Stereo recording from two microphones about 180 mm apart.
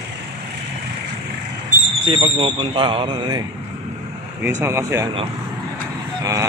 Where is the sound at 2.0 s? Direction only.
30° right (ahead or behind).